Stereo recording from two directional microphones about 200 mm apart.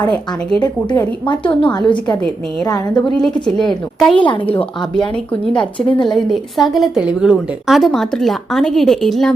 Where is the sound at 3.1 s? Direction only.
Centre (ahead or behind).